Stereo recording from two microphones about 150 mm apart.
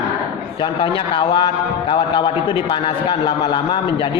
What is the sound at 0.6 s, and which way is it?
A man's voice, 30° left (ahead or behind).